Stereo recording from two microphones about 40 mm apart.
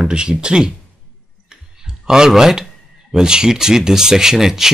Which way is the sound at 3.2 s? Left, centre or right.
Centre.